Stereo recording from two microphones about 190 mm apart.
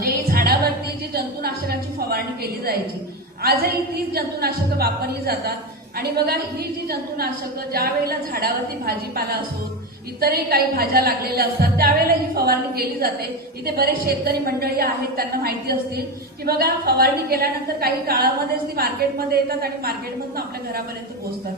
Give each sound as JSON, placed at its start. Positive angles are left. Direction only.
{"t": 0.0, "sound": "music", "side_deg": -50}
{"t": 1.1, "sound": "a sound", "side_deg": -55}
{"t": 3.4, "sound": "a woman's voice", "side_deg": -55}
{"t": 10.2, "sound": "a woman's voice", "side_deg": -50}